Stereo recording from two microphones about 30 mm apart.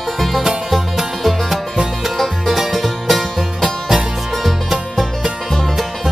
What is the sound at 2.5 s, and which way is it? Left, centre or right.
Music, centre.